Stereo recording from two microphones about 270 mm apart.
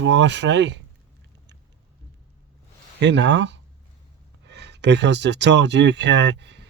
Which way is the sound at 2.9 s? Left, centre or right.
Right.